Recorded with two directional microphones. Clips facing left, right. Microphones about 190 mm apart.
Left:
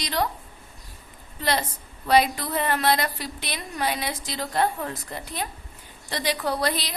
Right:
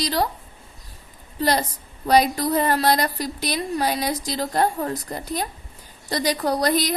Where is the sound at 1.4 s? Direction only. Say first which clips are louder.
Right 4 dB; 40° right (ahead or behind).